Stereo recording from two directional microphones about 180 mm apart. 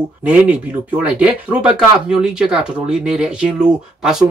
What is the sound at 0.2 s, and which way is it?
Speech, 5° right (ahead or behind).